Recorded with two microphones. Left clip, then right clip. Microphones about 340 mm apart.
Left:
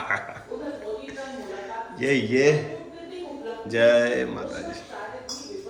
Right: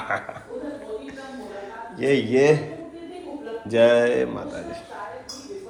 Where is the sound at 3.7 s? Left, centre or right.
Centre.